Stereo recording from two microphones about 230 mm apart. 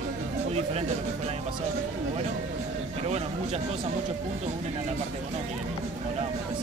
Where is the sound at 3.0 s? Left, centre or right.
Right.